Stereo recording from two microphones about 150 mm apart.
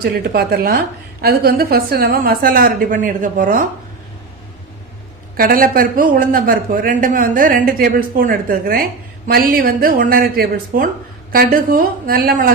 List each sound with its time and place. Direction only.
0.0 s a man's voice: 90° right; by 3.7 s 65° right (ahead or behind)
5.4 s a man's voice: 70° right (ahead or behind)